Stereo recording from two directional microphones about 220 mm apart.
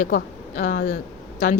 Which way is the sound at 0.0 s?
35° left (ahead or behind).